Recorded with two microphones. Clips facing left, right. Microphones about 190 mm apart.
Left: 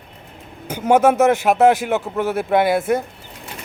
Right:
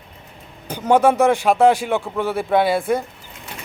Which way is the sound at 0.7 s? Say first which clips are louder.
Left 1 dB; 10° left (ahead or behind).